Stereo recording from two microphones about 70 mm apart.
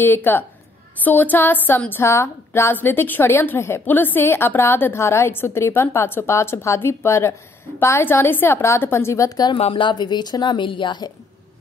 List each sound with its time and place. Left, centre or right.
0.0 s a sound: left
1.9 s a woman's voice: left
9.9 s speech: left